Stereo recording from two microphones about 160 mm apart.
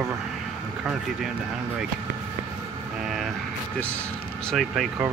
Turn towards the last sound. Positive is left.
turn(degrees=0)  # may be behind; listen again after turning